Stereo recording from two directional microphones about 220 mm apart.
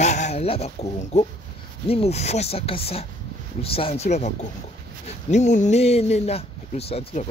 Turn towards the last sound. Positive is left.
turn(degrees=30)  # may be behind; listen again after turning